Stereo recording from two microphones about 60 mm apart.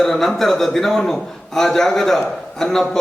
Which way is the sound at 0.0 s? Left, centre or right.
Centre.